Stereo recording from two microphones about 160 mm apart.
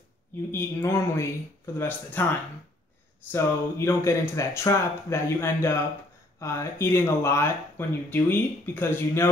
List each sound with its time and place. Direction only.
0.5 s speech: 15° left (ahead or behind)
3.3 s speech: 15° left (ahead or behind)